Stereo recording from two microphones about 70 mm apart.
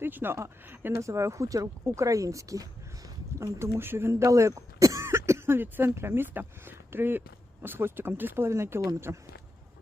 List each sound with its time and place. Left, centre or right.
0.0 s speech: right
0.9 s speech: right
3.3 s speech: right